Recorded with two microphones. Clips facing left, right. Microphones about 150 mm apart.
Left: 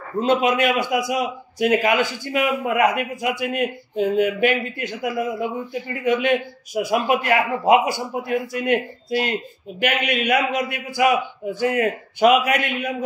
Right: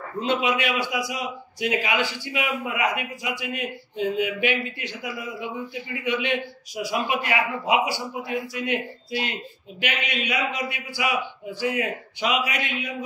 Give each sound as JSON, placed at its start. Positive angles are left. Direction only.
{"t": 0.2, "sound": "a man's voice", "side_deg": 45}